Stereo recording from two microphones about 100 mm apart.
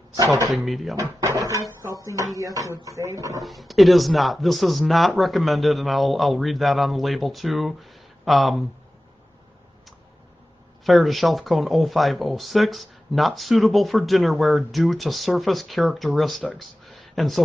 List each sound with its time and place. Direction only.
0.5 s speech: centre (ahead or behind)
0.9 s speech: 30° right (ahead or behind)
3.4 s speech: centre (ahead or behind)
10.9 s speech: centre (ahead or behind)